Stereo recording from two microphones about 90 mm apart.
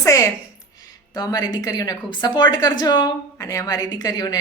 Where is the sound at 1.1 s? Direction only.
45° left (ahead or behind).